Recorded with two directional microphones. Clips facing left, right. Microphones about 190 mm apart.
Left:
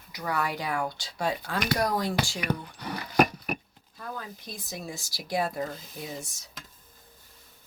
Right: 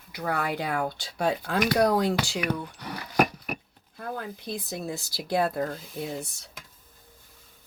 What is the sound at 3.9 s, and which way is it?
Speech, 55° right (ahead or behind).